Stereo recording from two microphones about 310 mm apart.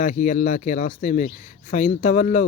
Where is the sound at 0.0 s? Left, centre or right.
Left.